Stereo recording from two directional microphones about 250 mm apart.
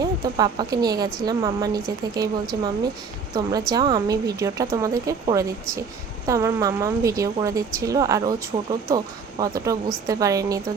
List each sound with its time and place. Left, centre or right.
0.0 s speech: centre
9.4 s speech: centre